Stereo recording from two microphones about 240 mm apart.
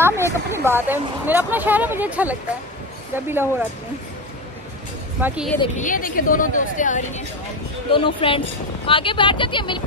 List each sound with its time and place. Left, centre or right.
0.0 s speech: centre
5.2 s a woman's voice: centre
5.6 s speech: left
7.9 s speech: left